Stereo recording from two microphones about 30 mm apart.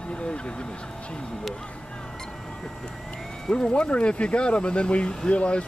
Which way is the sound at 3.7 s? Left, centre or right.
Left.